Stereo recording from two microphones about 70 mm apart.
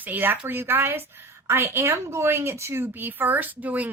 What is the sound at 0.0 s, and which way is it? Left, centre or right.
A woman's voice, right.